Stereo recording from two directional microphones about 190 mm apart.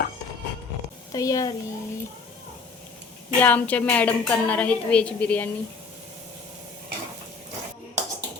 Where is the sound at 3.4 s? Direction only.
10° left (ahead or behind).